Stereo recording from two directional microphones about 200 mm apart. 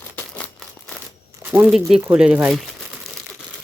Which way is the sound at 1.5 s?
10° right (ahead or behind).